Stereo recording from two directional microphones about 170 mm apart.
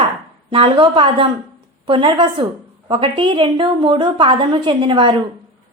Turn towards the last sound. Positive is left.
turn(degrees=-30)  # may be behind; listen again after turning